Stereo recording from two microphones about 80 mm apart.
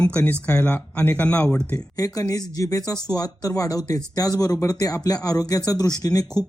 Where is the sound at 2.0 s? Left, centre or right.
Left.